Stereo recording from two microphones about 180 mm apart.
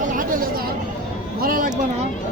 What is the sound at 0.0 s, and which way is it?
Chatter, 50° right (ahead or behind).